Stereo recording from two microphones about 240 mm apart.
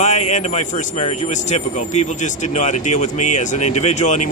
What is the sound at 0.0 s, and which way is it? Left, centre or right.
Speech, left.